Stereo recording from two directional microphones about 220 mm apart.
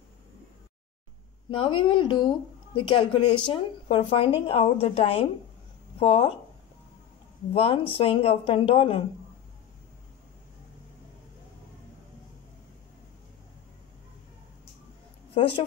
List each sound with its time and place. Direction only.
1.5 s a woman's voice: 25° left (ahead or behind)
7.5 s a woman's voice: 25° left (ahead or behind)
15.3 s a woman's voice: 25° left (ahead or behind)